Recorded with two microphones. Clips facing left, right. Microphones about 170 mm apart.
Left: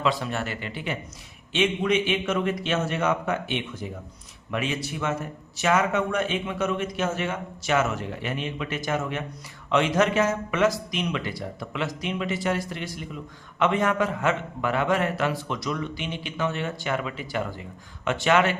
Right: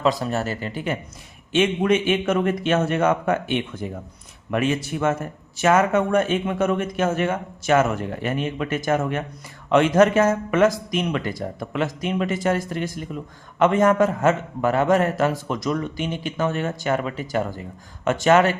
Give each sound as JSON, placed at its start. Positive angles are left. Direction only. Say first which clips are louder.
{"t": 0.0, "sound": "a man's voice", "louder": "right 4 dB", "side_deg": -40}